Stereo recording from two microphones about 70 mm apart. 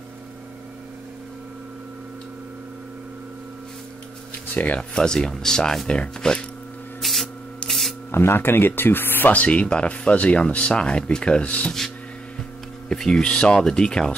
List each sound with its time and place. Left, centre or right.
4.7 s speech: centre
7.0 s spray: centre
7.6 s spray: centre
8.1 s speech: left; by 11.7 s centre
12.8 s speech: centre